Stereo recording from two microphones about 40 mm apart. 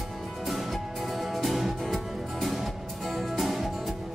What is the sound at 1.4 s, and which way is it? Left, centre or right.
Music, centre.